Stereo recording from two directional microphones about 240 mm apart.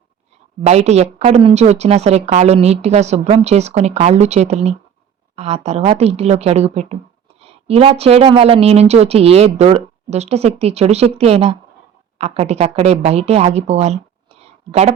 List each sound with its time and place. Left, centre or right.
0.6 s a woman's voice: right